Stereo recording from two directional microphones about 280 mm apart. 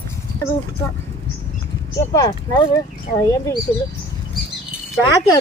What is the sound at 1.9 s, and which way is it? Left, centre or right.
Speech, centre.